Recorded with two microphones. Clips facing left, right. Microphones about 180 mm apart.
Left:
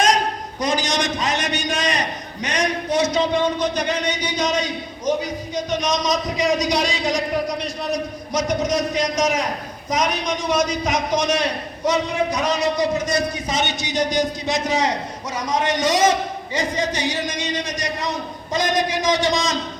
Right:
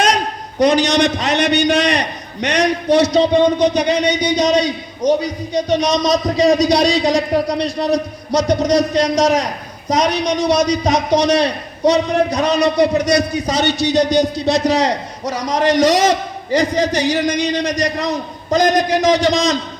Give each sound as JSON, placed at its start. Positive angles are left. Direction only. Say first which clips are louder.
{"t": 0.6, "sound": "a man's voice", "louder": "right 9 dB", "side_deg": -65}